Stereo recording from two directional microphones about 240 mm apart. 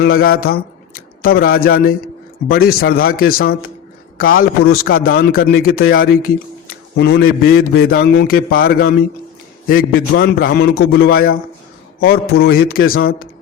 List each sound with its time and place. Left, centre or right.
0.0 s a man's voice: left
0.4 s a sound: left
2.5 s a man's voice: left